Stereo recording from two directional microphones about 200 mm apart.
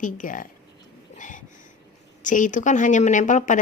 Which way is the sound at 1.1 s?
40° left (ahead or behind).